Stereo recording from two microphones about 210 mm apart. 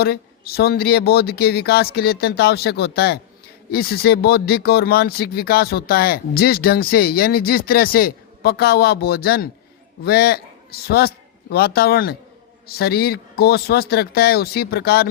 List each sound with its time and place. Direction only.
0.0 s a woman's voice: 50° left (ahead or behind)